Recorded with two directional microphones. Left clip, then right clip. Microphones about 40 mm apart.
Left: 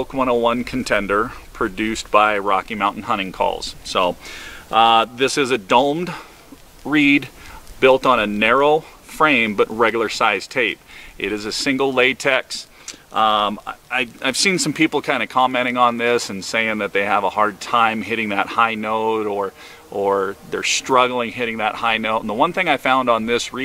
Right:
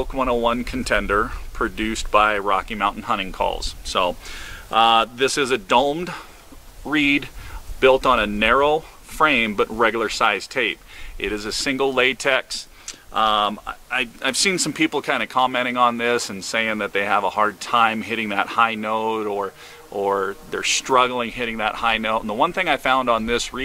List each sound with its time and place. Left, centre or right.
0.0 s speech: left